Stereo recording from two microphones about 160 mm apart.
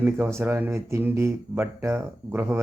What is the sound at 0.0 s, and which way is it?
Speech, 15° right (ahead or behind).